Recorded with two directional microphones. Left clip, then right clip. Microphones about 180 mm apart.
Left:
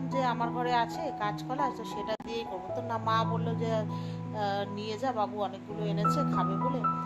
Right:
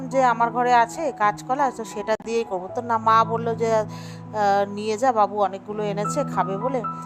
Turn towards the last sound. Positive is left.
turn(degrees=-45)  # may be behind; listen again after turning